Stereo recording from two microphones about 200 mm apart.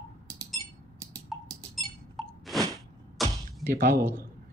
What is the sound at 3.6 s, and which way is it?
Speech, 45° right (ahead or behind).